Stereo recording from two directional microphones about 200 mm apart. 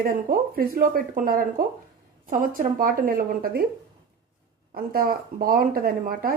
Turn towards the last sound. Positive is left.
turn(degrees=-45)  # may be behind; listen again after turning